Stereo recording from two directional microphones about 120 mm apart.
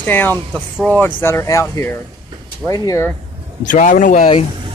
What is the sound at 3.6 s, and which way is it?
Speech, 90° left.